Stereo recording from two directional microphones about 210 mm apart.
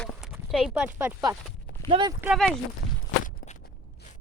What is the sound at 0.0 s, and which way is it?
Speech, centre (ahead or behind).